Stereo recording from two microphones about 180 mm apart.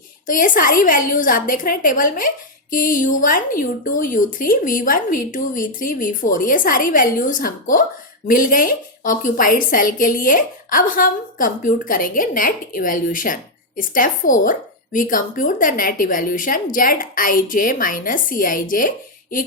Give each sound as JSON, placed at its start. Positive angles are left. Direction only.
{"t": 0.3, "sound": "a woman's voice", "side_deg": 50}